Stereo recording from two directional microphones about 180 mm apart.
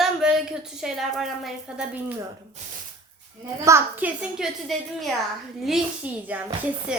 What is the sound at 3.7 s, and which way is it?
A woman's voice, 10° right (ahead or behind).